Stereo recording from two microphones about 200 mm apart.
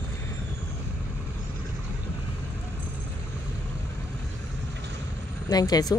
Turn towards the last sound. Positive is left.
turn(degrees=20)  # may be behind; listen again after turning